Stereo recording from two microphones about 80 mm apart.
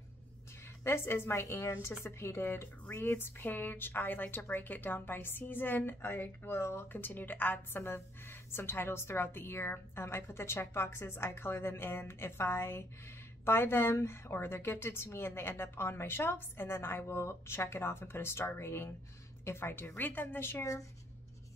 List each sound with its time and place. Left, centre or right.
0.8 s a woman's voice: left